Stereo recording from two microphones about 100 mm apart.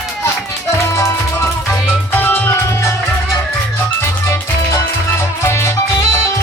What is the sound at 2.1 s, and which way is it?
Music, 20° left (ahead or behind).